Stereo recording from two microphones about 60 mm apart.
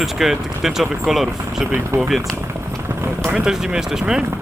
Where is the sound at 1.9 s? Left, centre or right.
Right.